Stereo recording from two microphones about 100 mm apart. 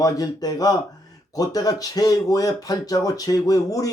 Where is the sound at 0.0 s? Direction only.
40° left (ahead or behind).